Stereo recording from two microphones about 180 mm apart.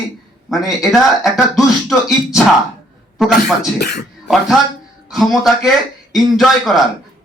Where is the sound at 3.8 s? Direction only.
70° left (ahead or behind).